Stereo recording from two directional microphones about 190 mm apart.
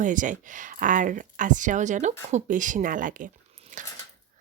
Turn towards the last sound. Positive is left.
turn(degrees=-40)  # may be behind; listen again after turning